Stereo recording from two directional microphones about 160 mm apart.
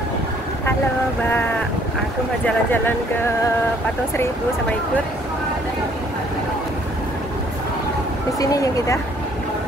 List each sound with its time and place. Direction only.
2.4 s speech: 10° left (ahead or behind)
8.4 s speech: 20° left (ahead or behind)